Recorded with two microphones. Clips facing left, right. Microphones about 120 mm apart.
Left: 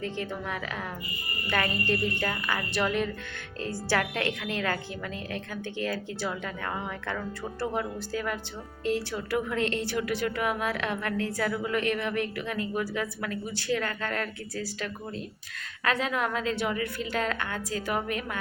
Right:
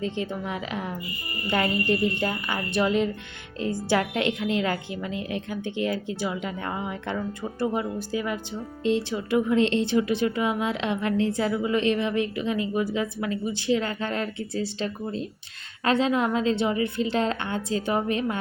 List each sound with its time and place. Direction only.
0.0 s a woman's voice: 20° right (ahead or behind)